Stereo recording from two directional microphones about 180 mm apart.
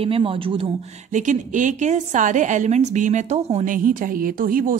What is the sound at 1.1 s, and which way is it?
A woman's voice, 45° right (ahead or behind).